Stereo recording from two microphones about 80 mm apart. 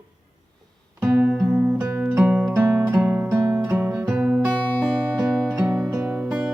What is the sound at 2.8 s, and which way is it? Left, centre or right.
Guitar, right.